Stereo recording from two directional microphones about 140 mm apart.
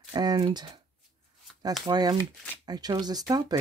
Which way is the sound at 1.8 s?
30° right (ahead or behind).